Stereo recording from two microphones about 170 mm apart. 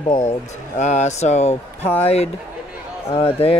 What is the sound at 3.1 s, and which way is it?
Speech, 35° left (ahead or behind).